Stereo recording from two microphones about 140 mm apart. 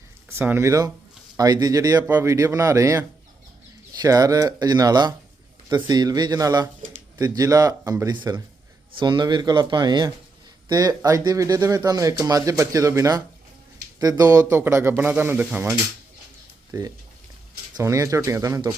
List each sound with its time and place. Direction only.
0.3 s a man's voice: 15° right (ahead or behind)
16.7 s speech: 25° right (ahead or behind)